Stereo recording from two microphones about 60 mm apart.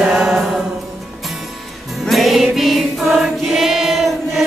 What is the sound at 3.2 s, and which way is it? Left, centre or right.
Choir, centre.